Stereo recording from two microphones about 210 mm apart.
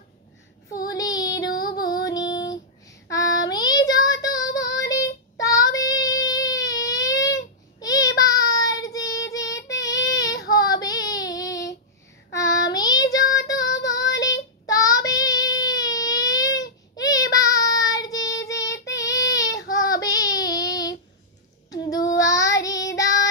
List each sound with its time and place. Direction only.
0.7 s child singing: 15° left (ahead or behind)
1.6 s music: 20° left (ahead or behind)
2.3 s child singing: 15° left (ahead or behind)